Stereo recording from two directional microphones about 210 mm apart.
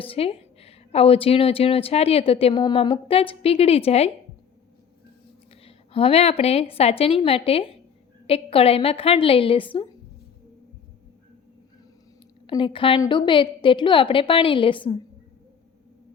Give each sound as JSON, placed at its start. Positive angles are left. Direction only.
{"t": 0.0, "sound": "a woman's voice", "side_deg": 25}
{"t": 5.5, "sound": "a woman's voice", "side_deg": 25}
{"t": 12.5, "sound": "a woman's voice", "side_deg": 25}